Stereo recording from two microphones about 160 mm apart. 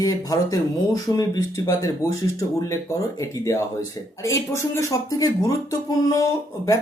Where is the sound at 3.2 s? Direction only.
20° left (ahead or behind).